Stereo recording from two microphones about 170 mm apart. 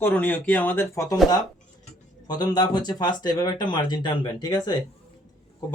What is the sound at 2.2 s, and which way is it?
Speech, 25° left (ahead or behind).